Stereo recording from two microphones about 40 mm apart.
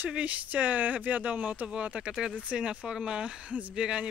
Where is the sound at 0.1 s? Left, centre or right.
Right.